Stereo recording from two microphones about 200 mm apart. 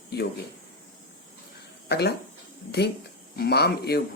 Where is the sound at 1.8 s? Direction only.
55° left (ahead or behind).